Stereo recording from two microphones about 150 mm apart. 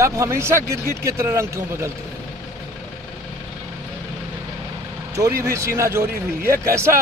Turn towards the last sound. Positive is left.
turn(degrees=-85)